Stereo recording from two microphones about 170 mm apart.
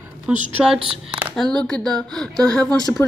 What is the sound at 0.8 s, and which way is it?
Speech, 30° right (ahead or behind).